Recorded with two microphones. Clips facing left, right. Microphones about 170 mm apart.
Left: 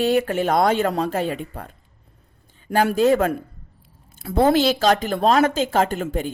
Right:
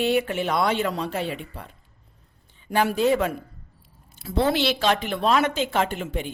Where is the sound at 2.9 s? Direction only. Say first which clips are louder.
Left 4 dB; 45° left (ahead or behind).